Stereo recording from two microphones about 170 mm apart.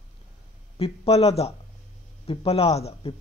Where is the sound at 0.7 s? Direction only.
35° left (ahead or behind).